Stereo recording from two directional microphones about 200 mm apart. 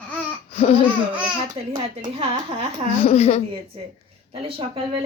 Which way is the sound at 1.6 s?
25° right (ahead or behind).